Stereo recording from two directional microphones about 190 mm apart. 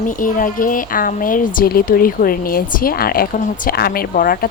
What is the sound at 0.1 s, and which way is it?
A woman's voice, 45° left (ahead or behind).